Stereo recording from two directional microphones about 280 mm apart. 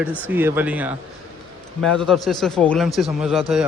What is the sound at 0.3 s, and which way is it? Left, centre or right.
A man's voice, centre.